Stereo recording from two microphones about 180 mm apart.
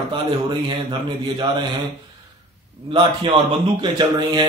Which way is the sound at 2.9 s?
30° right (ahead or behind).